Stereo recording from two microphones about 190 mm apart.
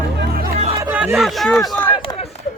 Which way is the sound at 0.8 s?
10° right (ahead or behind).